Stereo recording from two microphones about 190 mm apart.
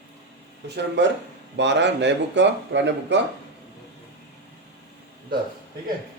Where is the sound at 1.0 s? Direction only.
65° right (ahead or behind).